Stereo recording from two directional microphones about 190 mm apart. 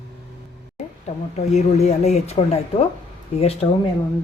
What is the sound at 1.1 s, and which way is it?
Speech, 35° left (ahead or behind).